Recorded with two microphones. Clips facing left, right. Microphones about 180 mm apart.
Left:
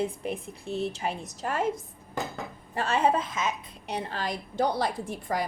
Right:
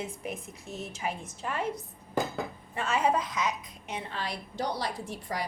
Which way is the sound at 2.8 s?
30° left (ahead or behind).